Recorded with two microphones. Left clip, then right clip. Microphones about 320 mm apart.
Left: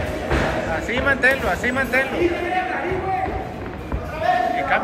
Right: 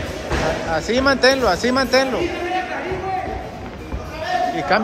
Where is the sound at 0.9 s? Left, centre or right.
Centre.